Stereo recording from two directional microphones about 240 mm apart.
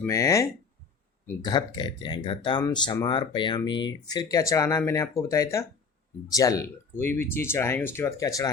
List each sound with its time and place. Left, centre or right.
0.0 s speech: centre
1.5 s speech: centre